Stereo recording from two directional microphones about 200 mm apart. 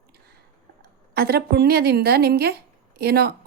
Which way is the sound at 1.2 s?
50° right (ahead or behind).